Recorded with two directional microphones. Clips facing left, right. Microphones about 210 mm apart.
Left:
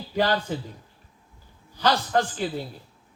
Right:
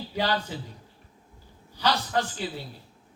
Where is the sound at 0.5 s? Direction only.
50° left (ahead or behind).